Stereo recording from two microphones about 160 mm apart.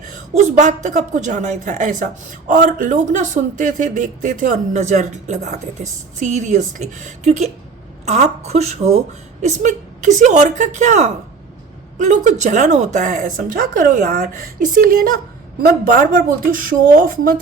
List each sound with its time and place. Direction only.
0.0 s a man's voice: 50° right (ahead or behind)